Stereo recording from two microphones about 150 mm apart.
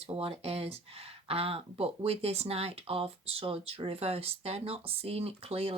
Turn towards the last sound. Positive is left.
turn(degrees=-45)  # may be behind; listen again after turning